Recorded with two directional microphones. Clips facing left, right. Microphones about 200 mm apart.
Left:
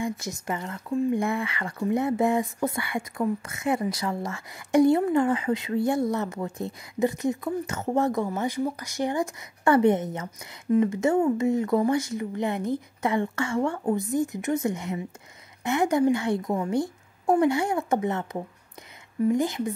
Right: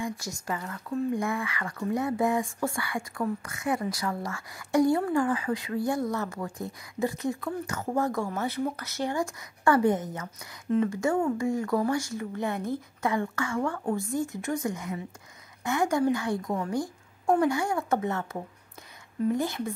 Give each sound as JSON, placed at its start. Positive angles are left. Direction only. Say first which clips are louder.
{"t": 0.5, "sound": "speech", "louder": "left 3 dB", "side_deg": 25}